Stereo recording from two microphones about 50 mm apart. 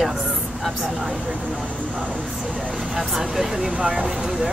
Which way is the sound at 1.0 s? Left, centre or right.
Right.